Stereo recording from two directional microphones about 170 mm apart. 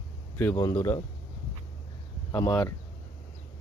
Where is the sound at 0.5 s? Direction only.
20° left (ahead or behind).